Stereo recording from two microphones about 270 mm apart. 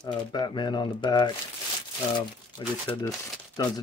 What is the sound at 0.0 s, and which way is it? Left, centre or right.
Speech, centre.